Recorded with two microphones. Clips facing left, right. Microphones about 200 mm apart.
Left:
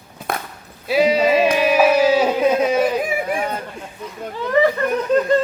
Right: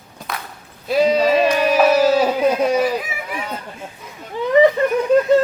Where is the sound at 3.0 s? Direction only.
50° left (ahead or behind).